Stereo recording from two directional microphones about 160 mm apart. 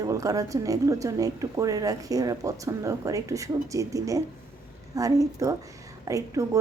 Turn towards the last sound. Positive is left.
turn(degrees=-20)  # may be behind; listen again after turning